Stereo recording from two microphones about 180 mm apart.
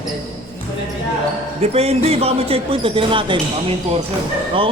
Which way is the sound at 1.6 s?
35° right (ahead or behind).